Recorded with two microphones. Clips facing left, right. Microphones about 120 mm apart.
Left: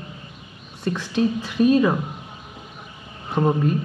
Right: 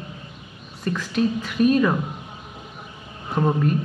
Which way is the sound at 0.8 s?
30° left (ahead or behind).